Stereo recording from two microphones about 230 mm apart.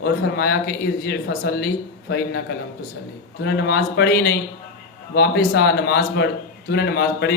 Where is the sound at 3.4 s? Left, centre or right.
Left.